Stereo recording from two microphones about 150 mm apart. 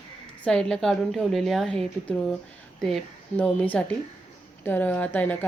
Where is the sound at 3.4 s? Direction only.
10° left (ahead or behind).